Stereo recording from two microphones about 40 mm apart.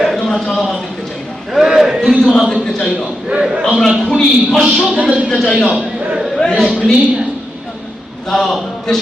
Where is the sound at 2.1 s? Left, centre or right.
Centre.